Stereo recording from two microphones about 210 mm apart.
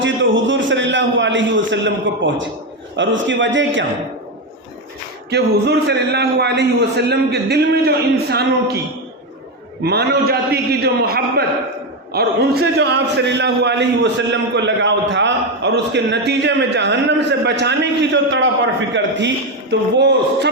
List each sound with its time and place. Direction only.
0.0 s a man's voice: 60° right (ahead or behind)
5.3 s a man's voice: 50° right (ahead or behind)
9.8 s a man's voice: 50° right (ahead or behind)